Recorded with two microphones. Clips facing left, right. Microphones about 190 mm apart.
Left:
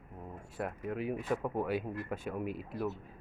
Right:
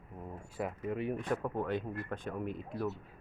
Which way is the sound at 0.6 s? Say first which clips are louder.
Right 1 dB; centre (ahead or behind).